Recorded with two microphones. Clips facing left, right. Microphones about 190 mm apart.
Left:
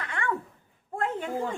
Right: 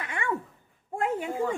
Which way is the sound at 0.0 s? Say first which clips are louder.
Even; 15° right (ahead or behind).